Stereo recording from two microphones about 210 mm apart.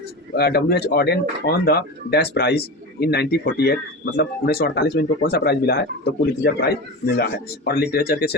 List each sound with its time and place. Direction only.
0.3 s speech: 50° left (ahead or behind)